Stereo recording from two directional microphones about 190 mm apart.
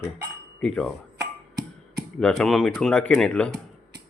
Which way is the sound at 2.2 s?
5° left (ahead or behind).